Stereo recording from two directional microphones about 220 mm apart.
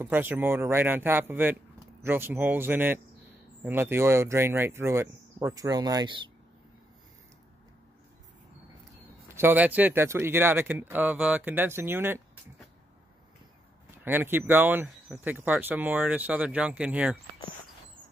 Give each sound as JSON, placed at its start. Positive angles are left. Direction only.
{"t": 0.0, "sound": "speech", "side_deg": -10}
{"t": 9.3, "sound": "speech", "side_deg": -10}
{"t": 14.0, "sound": "speech", "side_deg": -10}